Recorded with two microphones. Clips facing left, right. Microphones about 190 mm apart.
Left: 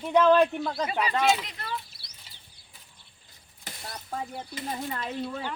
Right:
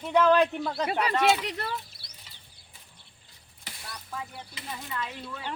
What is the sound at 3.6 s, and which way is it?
Speech, 45° left (ahead or behind).